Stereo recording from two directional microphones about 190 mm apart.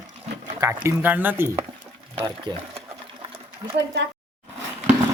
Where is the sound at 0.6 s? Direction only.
15° right (ahead or behind).